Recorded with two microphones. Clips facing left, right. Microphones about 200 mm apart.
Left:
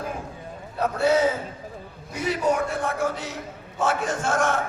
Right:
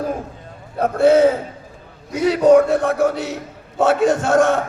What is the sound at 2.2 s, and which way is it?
Chant, 80° right.